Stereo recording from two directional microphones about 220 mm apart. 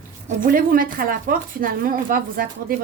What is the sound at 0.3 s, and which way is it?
A woman's voice, 40° right (ahead or behind).